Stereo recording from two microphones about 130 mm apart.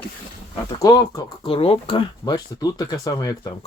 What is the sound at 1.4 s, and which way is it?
Speech, 45° left (ahead or behind).